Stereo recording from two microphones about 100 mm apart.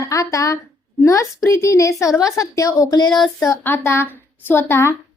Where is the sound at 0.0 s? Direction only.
35° left (ahead or behind).